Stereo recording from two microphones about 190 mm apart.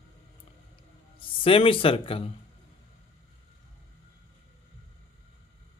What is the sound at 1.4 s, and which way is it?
Speech, 30° left (ahead or behind).